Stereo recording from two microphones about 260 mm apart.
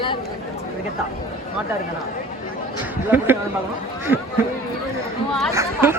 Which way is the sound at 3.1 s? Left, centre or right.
Centre.